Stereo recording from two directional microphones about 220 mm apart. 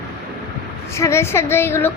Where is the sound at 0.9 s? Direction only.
10° left (ahead or behind).